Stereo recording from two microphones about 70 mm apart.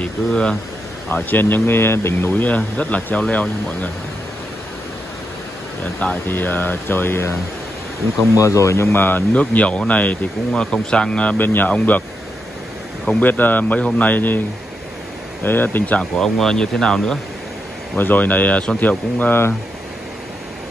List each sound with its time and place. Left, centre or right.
0.3 s speech: centre
1.0 s speech: left
6.2 s speech: left
8.4 s speech: left
9.3 s speech: centre
11.3 s speech: left
13.2 s speech: left
15.4 s speech: left
16.0 s speech: centre
17.9 s speech: left